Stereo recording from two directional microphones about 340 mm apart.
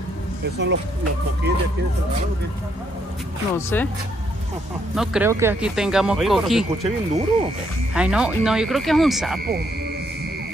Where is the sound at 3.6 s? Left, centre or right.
Centre.